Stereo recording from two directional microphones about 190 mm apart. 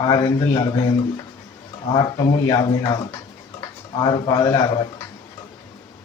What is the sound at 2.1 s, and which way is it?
Speech, 20° left (ahead or behind).